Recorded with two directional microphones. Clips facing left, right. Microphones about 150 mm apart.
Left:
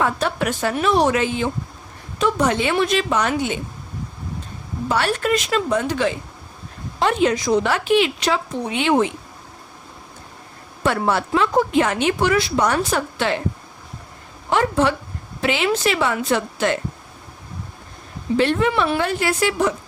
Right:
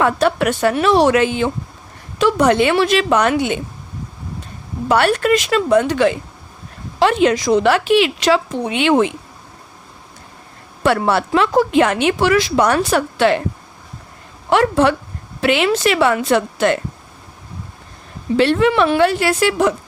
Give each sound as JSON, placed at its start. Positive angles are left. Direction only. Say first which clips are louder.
{"t": 0.0, "sound": "speech", "louder": "right 5 dB", "side_deg": -70}
{"t": 4.9, "sound": "speech", "louder": "right 6 dB", "side_deg": -65}
{"t": 7.0, "sound": "a woman's voice", "louder": "right 4 dB", "side_deg": -80}
{"t": 10.8, "sound": "speech", "louder": "right 4 dB", "side_deg": -75}
{"t": 14.5, "sound": "a woman's voice", "louder": "right 4 dB", "side_deg": -65}
{"t": 18.3, "sound": "speech", "louder": "right 5 dB", "side_deg": -80}